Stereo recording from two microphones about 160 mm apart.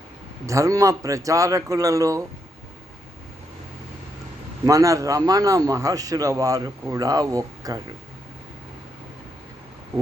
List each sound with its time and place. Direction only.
0.4 s a man's voice: 20° right (ahead or behind)
4.6 s a man's voice: 20° right (ahead or behind)